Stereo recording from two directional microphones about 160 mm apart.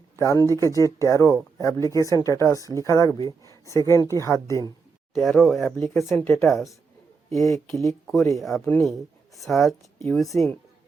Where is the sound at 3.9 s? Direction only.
20° left (ahead or behind).